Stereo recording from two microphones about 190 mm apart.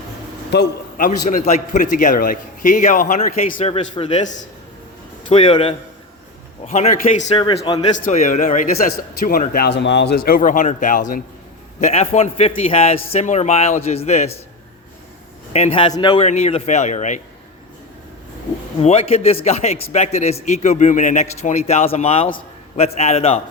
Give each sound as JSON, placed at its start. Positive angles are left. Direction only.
{"t": 0.5, "sound": "a man's voice", "side_deg": 50}
{"t": 5.3, "sound": "a man's voice", "side_deg": 25}
{"t": 7.9, "sound": "a man's voice", "side_deg": 40}
{"t": 11.8, "sound": "a man's voice", "side_deg": 35}
{"t": 15.5, "sound": "a man's voice", "side_deg": 30}
{"t": 18.8, "sound": "a man's voice", "side_deg": 35}